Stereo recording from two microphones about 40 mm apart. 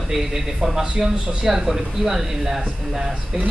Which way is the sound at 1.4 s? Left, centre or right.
Centre.